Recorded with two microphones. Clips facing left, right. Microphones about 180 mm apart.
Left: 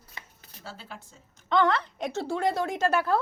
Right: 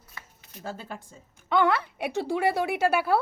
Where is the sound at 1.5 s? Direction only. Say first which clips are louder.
Right 1 dB; 10° right (ahead or behind).